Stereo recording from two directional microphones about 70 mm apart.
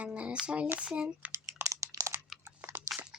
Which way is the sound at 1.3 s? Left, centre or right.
Right.